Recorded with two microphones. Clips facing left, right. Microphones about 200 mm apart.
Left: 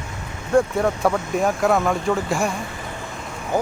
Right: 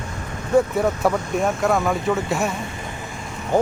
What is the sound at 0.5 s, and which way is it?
Speech, centre (ahead or behind).